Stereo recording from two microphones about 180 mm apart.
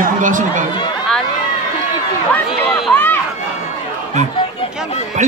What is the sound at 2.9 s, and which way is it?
Run, 10° left (ahead or behind).